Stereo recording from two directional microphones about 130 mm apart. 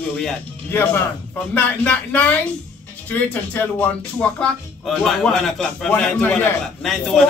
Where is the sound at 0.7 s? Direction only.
15° left (ahead or behind).